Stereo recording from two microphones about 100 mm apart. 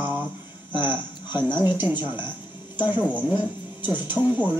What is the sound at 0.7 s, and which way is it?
Speech, 20° right (ahead or behind).